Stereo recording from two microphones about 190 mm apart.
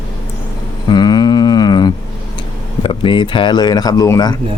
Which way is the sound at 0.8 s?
20° left (ahead or behind).